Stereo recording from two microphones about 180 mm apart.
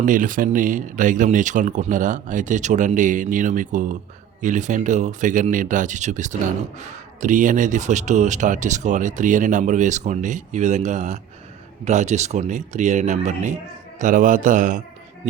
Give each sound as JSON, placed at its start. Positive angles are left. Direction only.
{"t": 0.0, "sound": "a man's voice", "side_deg": -45}